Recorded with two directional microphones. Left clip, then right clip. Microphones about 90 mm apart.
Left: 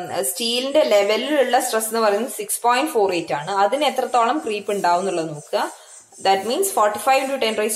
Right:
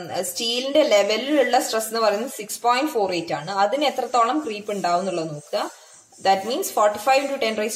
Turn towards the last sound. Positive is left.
turn(degrees=-20)  # may be behind; listen again after turning